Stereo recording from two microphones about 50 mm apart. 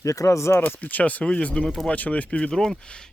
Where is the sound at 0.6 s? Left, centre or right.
Left.